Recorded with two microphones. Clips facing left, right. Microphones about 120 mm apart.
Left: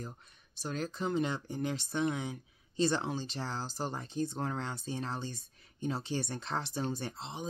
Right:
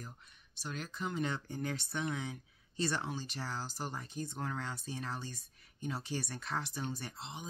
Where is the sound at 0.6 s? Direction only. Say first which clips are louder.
Left 5 dB; 40° left (ahead or behind).